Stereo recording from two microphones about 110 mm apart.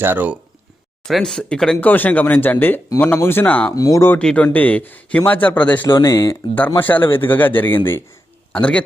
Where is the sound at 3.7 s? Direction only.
30° left (ahead or behind).